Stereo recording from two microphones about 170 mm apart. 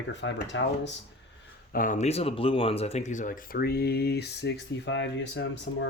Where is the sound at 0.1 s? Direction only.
90° left.